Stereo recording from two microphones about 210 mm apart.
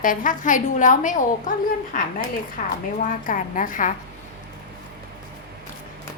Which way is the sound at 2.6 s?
40° left (ahead or behind).